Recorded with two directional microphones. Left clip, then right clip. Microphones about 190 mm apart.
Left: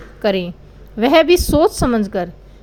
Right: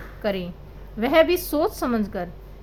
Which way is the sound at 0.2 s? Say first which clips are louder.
Left 9 dB; 40° left (ahead or behind).